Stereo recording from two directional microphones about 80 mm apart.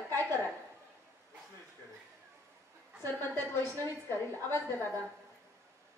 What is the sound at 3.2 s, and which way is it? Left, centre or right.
A woman's voice, left.